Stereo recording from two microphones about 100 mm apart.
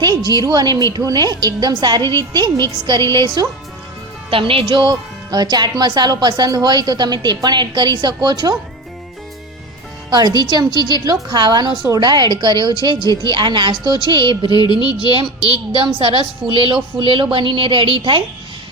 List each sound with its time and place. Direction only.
0.3 s a woman's voice: 45° right (ahead or behind)
4.3 s a woman's voice: 65° right (ahead or behind)
4.8 s a woman's voice: 40° right (ahead or behind)
10.1 s a woman's voice: 45° right (ahead or behind)
14.4 s a sound: 45° left (ahead or behind)
15.7 s a woman's voice: 60° right (ahead or behind)